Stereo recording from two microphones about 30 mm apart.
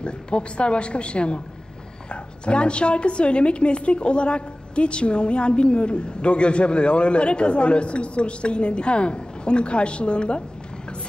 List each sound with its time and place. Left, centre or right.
0.0 s a woman's voice: left